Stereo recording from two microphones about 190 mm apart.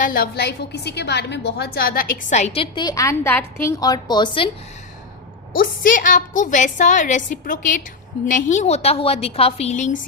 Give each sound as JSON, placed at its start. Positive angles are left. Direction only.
{"t": 0.0, "sound": "a woman's voice", "side_deg": 50}
{"t": 5.5, "sound": "a woman's voice", "side_deg": 45}